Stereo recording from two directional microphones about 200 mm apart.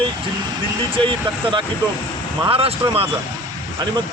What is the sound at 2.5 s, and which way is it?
Speech, 30° right (ahead or behind).